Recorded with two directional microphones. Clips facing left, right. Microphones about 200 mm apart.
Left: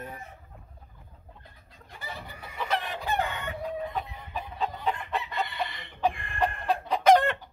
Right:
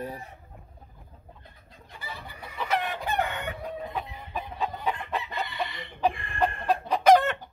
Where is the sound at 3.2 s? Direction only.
55° right (ahead or behind).